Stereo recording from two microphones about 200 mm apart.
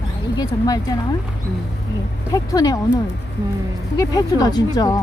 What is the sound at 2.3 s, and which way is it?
Speech, 20° left (ahead or behind).